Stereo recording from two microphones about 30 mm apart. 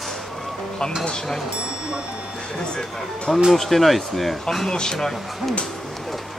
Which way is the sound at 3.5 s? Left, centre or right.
Centre.